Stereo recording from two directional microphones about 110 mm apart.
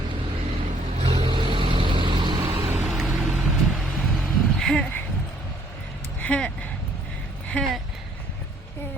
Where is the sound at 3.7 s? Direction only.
Centre (ahead or behind).